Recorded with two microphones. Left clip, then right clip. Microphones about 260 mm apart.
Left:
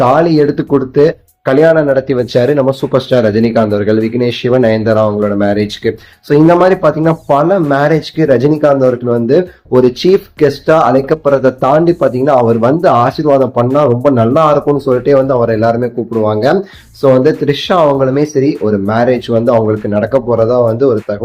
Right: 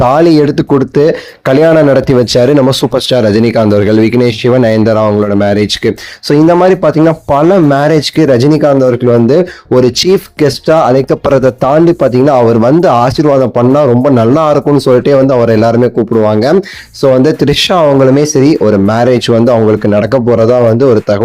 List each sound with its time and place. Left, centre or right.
0.0 s speech: right